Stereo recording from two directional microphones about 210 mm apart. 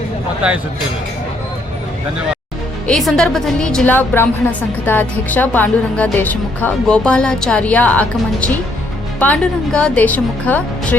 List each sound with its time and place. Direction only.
2.8 s a woman's voice: centre (ahead or behind)